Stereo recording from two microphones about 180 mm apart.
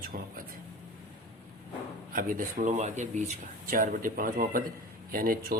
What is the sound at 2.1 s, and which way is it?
Speech, 50° right (ahead or behind).